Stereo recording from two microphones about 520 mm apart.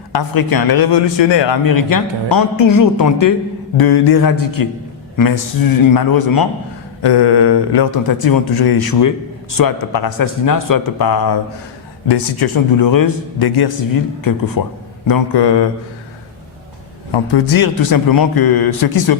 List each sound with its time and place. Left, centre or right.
0.1 s a man's voice: left
1.6 s a man's voice: left
17.1 s a man's voice: left